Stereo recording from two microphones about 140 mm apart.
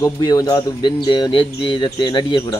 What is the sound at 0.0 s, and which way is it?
Speech, 25° left (ahead or behind).